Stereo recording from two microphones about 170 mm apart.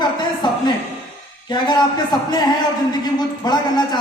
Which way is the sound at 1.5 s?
25° left (ahead or behind).